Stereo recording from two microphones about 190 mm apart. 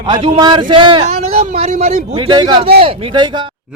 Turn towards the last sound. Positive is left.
turn(degrees=-25)  # may be behind; listen again after turning